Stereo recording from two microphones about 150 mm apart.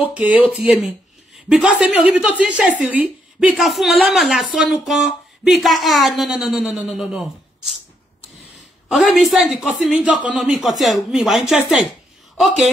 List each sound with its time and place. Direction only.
0.0 s a woman's voice: 10° right (ahead or behind)
8.8 s a woman's voice: centre (ahead or behind)